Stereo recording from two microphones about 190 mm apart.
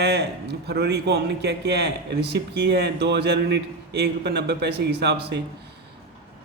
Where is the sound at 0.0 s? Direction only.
60° right (ahead or behind).